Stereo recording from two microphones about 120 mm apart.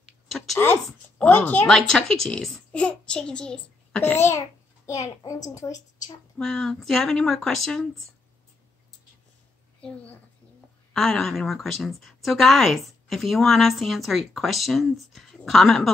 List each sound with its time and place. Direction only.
0.6 s a child's voice: 15° left (ahead or behind)
6.3 s a woman's voice: 5° left (ahead or behind)
9.8 s a woman's voice: 10° left (ahead or behind)